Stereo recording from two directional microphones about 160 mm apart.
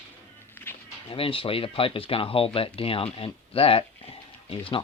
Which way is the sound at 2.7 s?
35° left (ahead or behind).